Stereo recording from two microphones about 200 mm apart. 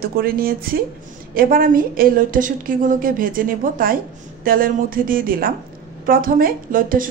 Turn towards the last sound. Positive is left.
turn(degrees=-45)  # may be behind; listen again after turning